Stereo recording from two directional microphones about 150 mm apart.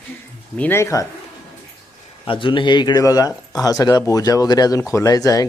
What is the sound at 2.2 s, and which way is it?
Speech, 35° left (ahead or behind).